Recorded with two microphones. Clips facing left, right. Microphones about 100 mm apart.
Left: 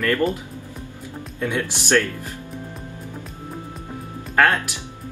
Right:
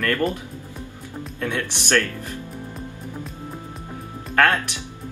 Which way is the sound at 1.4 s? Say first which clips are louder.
Left 2 dB; 15° left (ahead or behind).